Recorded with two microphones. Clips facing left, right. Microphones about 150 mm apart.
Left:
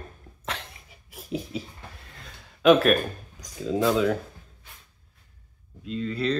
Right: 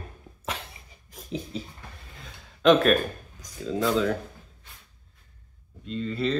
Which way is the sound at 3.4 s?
15° left (ahead or behind).